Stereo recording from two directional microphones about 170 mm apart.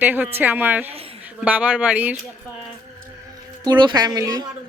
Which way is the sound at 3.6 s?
25° right (ahead or behind).